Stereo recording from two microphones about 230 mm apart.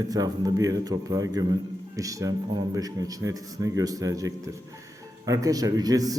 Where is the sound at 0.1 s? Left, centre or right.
Centre.